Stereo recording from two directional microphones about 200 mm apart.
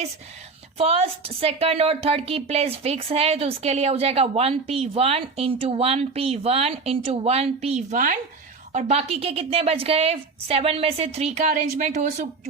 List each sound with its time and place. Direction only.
0.8 s speech: 30° right (ahead or behind)